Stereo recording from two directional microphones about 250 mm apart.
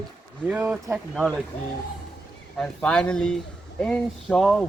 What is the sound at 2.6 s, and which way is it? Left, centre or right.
Speech, centre.